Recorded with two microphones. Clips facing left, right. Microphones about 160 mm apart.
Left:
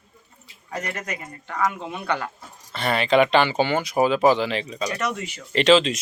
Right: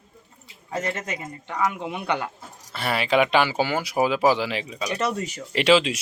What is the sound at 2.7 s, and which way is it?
Speech, 5° right (ahead or behind).